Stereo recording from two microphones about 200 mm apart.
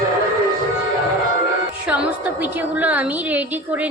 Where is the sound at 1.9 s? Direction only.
5° right (ahead or behind).